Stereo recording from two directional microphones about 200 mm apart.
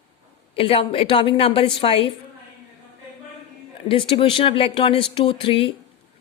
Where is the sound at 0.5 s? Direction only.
25° left (ahead or behind).